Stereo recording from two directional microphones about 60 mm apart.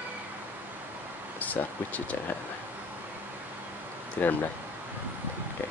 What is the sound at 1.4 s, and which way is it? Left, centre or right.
Speech, left.